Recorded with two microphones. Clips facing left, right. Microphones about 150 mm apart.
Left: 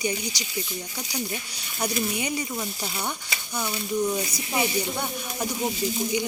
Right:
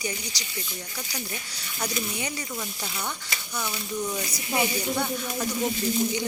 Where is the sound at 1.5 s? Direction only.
15° left (ahead or behind).